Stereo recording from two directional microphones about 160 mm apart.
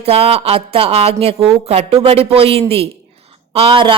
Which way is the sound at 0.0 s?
40° right (ahead or behind).